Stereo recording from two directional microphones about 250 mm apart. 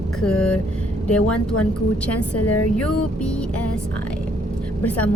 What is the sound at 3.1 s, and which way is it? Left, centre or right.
Music, centre.